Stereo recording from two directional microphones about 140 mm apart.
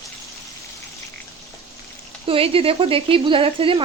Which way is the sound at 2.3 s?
40° right (ahead or behind).